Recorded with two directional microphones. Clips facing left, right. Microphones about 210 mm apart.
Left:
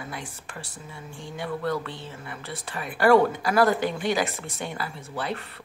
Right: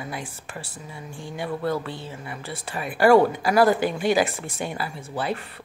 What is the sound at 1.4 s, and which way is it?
Music, 25° right (ahead or behind).